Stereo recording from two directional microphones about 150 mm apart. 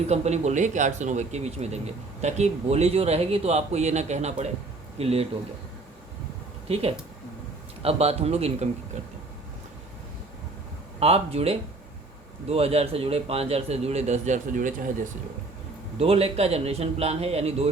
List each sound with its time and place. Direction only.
0.1 s speech: 50° right (ahead or behind)
7.8 s speech: 40° right (ahead or behind)
11.0 s speech: 40° right (ahead or behind); by 14.8 s 60° right (ahead or behind)
16.0 s speech: 40° right (ahead or behind)